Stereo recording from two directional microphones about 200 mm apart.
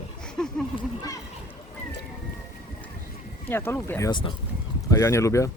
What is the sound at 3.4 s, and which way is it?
Speech, 10° left (ahead or behind).